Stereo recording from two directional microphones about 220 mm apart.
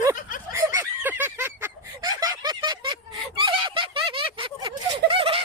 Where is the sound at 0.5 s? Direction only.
15° right (ahead or behind).